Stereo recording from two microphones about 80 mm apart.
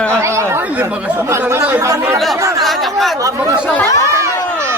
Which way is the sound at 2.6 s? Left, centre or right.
Centre.